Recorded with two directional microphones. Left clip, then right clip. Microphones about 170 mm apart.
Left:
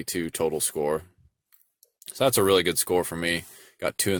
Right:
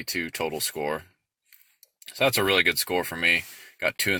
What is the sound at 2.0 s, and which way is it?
Speech, 50° left (ahead or behind).